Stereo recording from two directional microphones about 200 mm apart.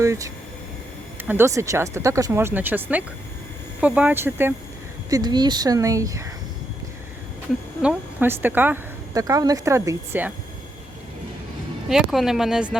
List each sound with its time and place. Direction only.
0.0 s a woman's voice: 15° right (ahead or behind)
7.8 s a woman's voice: 10° right (ahead or behind)
11.9 s speech: centre (ahead or behind)